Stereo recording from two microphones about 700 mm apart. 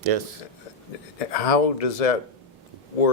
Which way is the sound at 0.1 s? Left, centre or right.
Right.